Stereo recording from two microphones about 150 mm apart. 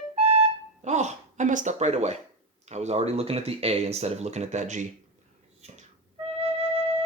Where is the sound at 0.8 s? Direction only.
50° right (ahead or behind).